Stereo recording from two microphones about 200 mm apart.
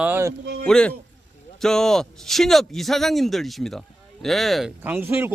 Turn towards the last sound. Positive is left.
turn(degrees=-10)  # may be behind; listen again after turning